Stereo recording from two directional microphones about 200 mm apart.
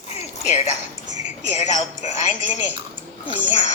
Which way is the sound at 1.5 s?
35° left (ahead or behind).